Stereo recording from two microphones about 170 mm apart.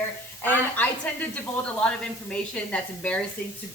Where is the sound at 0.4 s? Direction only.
10° left (ahead or behind).